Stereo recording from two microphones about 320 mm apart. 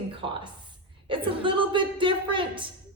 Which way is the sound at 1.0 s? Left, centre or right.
Centre.